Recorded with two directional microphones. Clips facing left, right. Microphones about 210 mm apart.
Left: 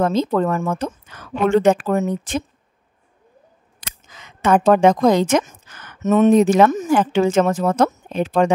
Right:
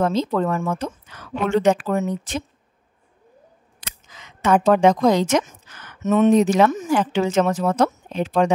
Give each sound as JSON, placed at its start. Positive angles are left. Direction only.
{"t": 0.0, "sound": "a woman's voice", "side_deg": 50}
{"t": 4.1, "sound": "a woman's voice", "side_deg": 50}